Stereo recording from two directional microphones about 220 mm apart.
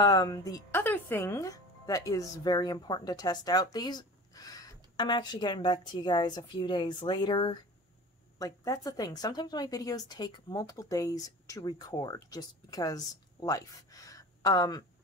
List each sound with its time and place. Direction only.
0.0 s speech: 15° left (ahead or behind)